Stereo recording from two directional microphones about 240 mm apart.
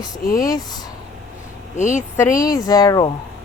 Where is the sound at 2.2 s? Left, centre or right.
Centre.